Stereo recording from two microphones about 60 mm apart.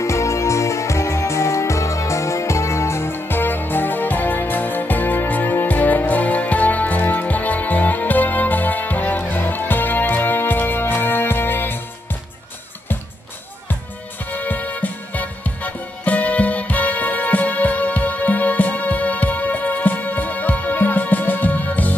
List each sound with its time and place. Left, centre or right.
0.0 s music: left
14.3 s music: left